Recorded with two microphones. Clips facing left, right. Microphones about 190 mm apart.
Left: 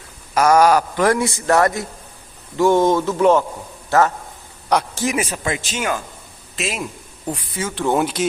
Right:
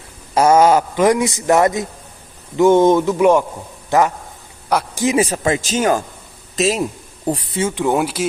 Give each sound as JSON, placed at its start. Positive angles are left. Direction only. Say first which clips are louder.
{"t": 0.3, "sound": "a man's voice", "louder": "right 2 dB", "side_deg": -25}
{"t": 5.1, "sound": "speech", "louder": "right 6 dB", "side_deg": -35}
{"t": 7.9, "sound": "speech", "louder": "even", "side_deg": -5}